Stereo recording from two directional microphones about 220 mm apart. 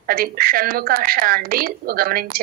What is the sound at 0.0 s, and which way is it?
A woman's voice, 40° right (ahead or behind).